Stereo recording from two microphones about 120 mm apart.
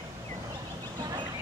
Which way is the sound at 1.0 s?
35° right (ahead or behind).